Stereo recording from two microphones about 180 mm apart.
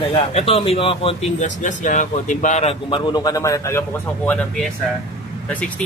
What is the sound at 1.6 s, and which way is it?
Speech, 45° left (ahead or behind).